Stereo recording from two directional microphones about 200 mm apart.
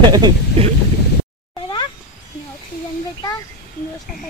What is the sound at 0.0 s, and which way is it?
Speech, 20° right (ahead or behind).